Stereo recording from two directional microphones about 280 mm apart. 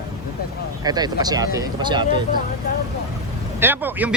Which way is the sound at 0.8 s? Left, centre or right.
Centre.